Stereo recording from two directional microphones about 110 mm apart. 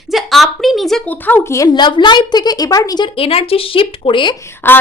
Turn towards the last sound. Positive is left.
turn(degrees=20)  # may be behind; listen again after turning